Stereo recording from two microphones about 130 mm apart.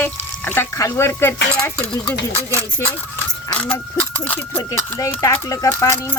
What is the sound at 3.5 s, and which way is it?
Speech, 10° left (ahead or behind).